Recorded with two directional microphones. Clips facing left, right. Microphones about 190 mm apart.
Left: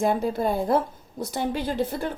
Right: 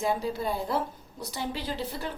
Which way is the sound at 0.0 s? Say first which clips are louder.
Left 6 dB; 50° left (ahead or behind).